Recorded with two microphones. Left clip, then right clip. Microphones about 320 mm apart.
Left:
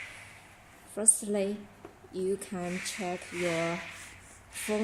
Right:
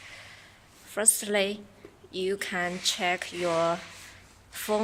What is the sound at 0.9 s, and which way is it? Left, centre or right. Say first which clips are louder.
A woman's voice: right 4 dB; right.